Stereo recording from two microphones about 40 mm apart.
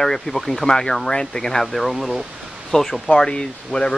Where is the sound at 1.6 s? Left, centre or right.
Centre.